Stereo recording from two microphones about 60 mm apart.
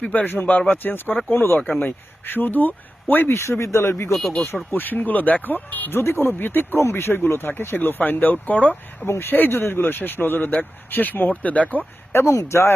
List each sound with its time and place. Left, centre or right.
0.0 s speech: left
4.1 s speech: centre
4.7 s speech: left
6.0 s speech: left
9.0 s speech: left
12.1 s speech: left